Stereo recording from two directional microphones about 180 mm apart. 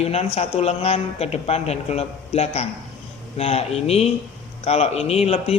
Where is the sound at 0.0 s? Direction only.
35° left (ahead or behind).